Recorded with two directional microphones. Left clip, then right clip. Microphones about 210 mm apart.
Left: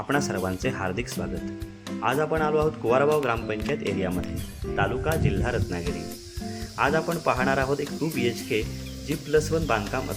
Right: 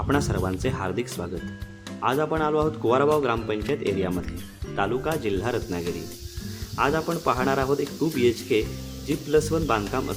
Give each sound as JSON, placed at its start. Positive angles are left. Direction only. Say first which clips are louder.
{"t": 0.1, "sound": "speech", "louder": "even", "side_deg": 0}